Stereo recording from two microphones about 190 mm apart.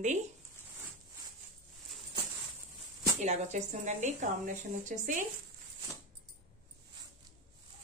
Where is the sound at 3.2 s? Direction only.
40° right (ahead or behind).